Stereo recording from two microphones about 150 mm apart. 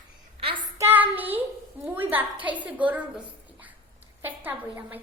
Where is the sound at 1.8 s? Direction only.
10° right (ahead or behind).